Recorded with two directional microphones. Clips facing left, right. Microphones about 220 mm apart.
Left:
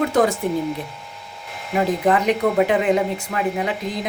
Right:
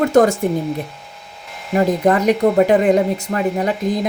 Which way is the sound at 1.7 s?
45° right (ahead or behind).